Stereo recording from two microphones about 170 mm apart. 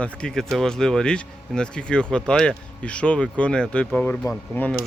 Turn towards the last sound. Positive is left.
turn(degrees=10)  # may be behind; listen again after turning